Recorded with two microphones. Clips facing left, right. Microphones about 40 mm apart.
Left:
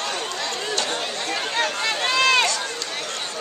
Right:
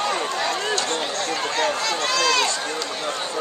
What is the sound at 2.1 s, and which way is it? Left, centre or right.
Run, left.